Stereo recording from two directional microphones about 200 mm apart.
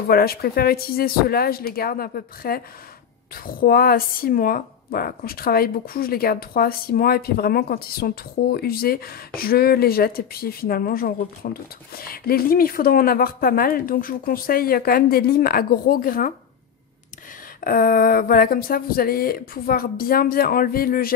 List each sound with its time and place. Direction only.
0.1 s speech: 50° left (ahead or behind)
17.6 s speech: 45° left (ahead or behind)